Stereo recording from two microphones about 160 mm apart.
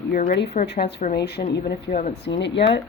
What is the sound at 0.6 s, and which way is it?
Speech, 90° left.